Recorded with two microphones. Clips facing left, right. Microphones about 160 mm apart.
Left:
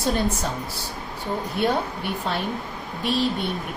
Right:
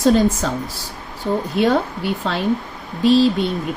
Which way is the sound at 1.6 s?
90° right.